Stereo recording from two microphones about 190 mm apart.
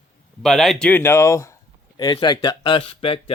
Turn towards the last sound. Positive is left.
turn(degrees=30)  # may be behind; listen again after turning